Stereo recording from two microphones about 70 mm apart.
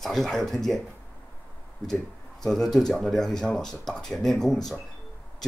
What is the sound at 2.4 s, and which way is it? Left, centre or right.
Speech, centre.